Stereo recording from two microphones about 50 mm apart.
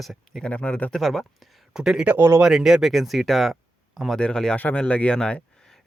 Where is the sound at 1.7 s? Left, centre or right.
Centre.